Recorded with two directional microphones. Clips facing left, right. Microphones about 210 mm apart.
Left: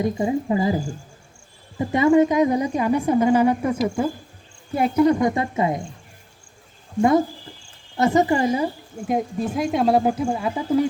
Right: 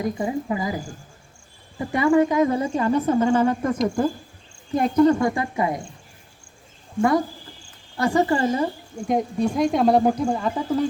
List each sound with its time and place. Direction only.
0.0 s speech: 25° left (ahead or behind)
5.3 s speech: 25° left (ahead or behind)
7.9 s speech: 20° left (ahead or behind)